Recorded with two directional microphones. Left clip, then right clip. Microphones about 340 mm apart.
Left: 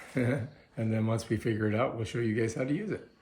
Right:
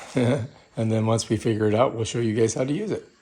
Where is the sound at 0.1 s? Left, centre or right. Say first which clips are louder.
Right 8 dB; centre.